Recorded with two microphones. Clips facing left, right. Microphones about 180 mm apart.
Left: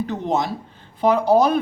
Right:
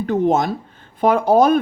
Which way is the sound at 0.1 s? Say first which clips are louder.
Right 6 dB; 50° right (ahead or behind).